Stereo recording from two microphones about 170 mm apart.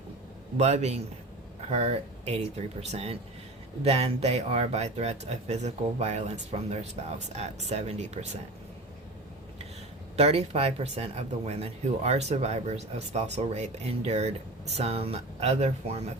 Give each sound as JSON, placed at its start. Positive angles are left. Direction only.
{"t": 0.5, "sound": "speech", "side_deg": -40}
{"t": 10.2, "sound": "speech", "side_deg": -40}